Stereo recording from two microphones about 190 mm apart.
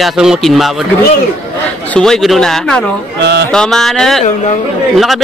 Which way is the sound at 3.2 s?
65° right (ahead or behind).